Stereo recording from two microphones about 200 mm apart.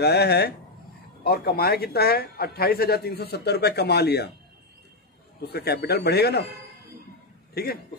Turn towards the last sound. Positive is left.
turn(degrees=50)  # may be behind; listen again after turning